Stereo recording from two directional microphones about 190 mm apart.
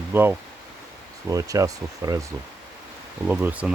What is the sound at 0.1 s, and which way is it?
Speech, 10° right (ahead or behind).